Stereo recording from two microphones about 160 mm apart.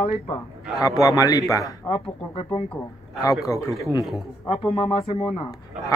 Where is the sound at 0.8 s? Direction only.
20° left (ahead or behind).